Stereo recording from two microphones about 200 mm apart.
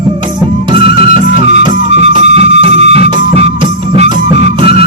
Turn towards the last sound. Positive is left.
turn(degrees=-35)  # may be behind; listen again after turning